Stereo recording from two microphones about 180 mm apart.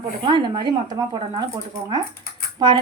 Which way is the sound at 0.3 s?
25° right (ahead or behind).